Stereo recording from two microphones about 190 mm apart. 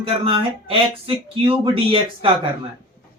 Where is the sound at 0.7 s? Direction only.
30° right (ahead or behind).